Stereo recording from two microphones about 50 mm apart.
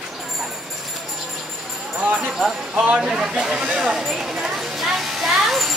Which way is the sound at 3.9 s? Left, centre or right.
Centre.